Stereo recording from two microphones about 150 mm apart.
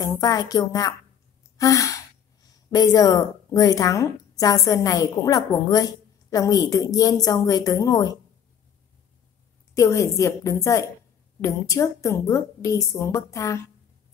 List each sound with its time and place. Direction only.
0.0 s a woman's voice: 25° left (ahead or behind)
1.6 s sigh: 20° left (ahead or behind)
2.7 s a woman's voice: 25° left (ahead or behind)
9.8 s a woman's voice: 20° left (ahead or behind)